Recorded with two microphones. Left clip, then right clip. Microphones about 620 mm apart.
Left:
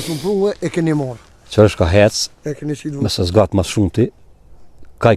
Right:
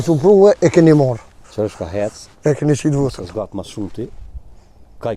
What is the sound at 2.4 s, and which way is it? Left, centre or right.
Speech, right.